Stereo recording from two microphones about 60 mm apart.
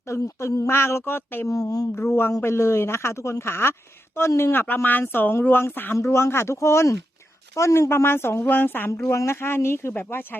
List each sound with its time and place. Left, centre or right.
0.1 s a sound: left
0.7 s speech: left
1.5 s speech: left
2.0 s speech: left
9.0 s speech: left